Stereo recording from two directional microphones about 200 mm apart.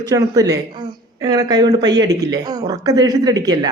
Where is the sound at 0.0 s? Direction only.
15° right (ahead or behind).